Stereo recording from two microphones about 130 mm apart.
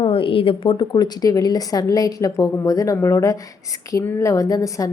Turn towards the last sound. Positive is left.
turn(degrees=25)  # may be behind; listen again after turning